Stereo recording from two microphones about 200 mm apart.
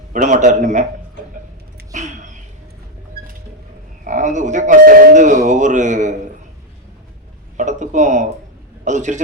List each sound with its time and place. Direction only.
0.1 s speech: 40° right (ahead or behind)
1.9 s a sound: 35° right (ahead or behind)
4.0 s speech: 40° right (ahead or behind)
7.5 s a man's voice: 35° right (ahead or behind)